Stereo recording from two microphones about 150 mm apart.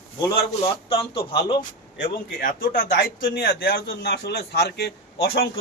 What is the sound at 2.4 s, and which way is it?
A man's voice, 70° left (ahead or behind).